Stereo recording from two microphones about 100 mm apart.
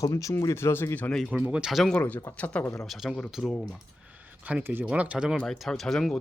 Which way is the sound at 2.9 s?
5° right (ahead or behind).